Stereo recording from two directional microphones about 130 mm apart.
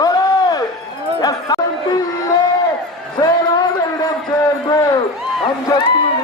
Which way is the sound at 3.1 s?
35° left (ahead or behind).